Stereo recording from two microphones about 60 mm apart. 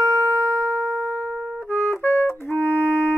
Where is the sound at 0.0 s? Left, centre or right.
Right.